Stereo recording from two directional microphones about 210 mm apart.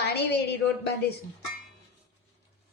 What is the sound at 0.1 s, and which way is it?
Speech, 50° left (ahead or behind).